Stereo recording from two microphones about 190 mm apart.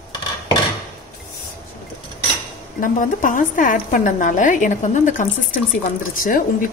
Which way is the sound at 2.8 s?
45° left (ahead or behind).